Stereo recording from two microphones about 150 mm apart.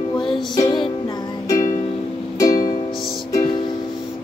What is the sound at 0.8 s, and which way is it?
Music, 30° left (ahead or behind).